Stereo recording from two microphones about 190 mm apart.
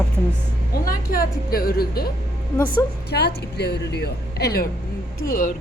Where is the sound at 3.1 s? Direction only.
60° left (ahead or behind).